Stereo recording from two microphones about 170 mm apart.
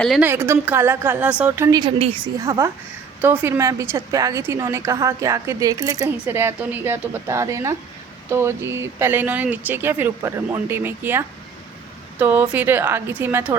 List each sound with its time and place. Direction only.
0.2 s a woman's voice: 10° right (ahead or behind); by 2.3 s 30° right (ahead or behind)
2.4 s a woman's voice: 15° right (ahead or behind)